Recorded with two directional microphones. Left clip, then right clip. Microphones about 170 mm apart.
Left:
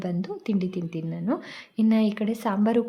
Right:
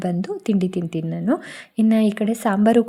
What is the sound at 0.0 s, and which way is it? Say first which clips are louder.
A woman's voice: right 6 dB; 30° right (ahead or behind).